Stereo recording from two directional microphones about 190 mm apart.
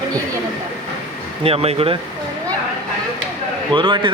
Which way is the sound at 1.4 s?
30° right (ahead or behind).